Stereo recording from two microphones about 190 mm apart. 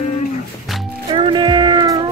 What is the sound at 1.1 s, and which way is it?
Music, 25° right (ahead or behind).